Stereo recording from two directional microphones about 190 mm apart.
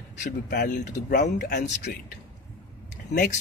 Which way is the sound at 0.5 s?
45° left (ahead or behind).